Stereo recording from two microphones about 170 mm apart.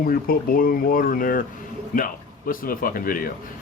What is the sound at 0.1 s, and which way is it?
Speech, 55° left (ahead or behind).